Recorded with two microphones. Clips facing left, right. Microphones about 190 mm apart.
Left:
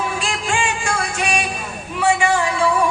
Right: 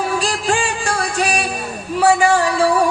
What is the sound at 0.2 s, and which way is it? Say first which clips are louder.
Music: right 3 dB; 35° right (ahead or behind).